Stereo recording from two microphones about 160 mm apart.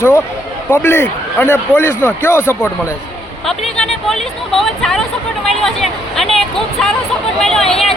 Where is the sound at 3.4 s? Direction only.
Centre (ahead or behind).